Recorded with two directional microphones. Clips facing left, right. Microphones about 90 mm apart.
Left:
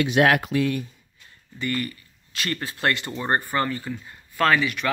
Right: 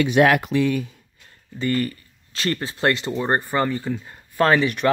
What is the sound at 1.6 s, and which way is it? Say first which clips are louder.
Speech: right 5 dB; 35° right (ahead or behind).